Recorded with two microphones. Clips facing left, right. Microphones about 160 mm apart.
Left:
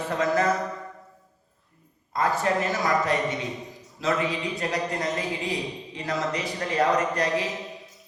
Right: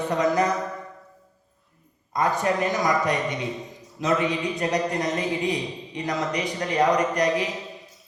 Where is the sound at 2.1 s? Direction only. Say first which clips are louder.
Right 1 dB; 20° right (ahead or behind).